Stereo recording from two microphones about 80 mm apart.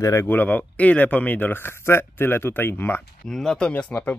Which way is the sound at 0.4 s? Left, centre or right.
Left.